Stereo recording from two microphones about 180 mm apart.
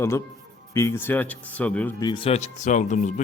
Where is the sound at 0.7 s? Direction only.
15° left (ahead or behind).